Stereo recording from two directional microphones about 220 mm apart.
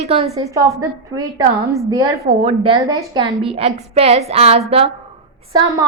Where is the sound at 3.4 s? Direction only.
25° right (ahead or behind).